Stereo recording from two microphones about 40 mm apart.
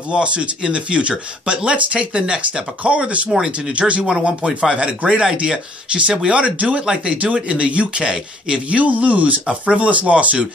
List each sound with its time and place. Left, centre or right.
0.1 s speech: right
2.8 s speech: right
8.6 s speech: right